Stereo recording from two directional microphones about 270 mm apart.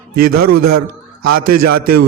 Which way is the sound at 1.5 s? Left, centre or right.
Right.